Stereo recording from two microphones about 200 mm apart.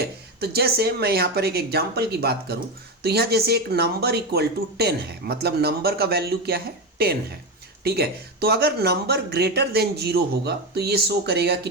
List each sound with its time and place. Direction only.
0.0 s speech: 55° right (ahead or behind)
7.9 s speech: 55° right (ahead or behind)